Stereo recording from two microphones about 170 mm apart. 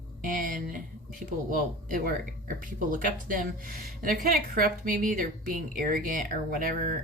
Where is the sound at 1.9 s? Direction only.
55° right (ahead or behind).